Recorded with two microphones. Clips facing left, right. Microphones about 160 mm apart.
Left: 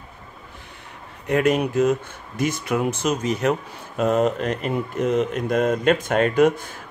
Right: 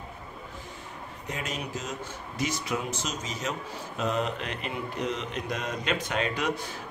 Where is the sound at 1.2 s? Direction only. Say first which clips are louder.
Left 16 dB; 60° left (ahead or behind).